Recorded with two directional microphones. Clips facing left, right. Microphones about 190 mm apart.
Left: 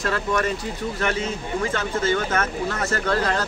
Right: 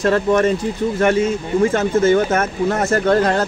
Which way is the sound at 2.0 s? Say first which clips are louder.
Right 8 dB; 25° right (ahead or behind).